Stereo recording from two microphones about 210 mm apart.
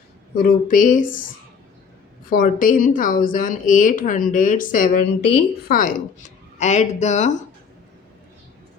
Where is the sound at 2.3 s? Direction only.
40° left (ahead or behind).